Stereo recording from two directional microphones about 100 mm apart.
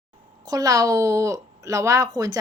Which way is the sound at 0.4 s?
35° right (ahead or behind).